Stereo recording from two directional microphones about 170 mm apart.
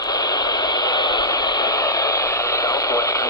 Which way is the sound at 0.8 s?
25° left (ahead or behind).